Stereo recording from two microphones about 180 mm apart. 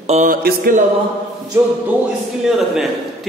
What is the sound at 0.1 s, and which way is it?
Mantra, 45° right (ahead or behind).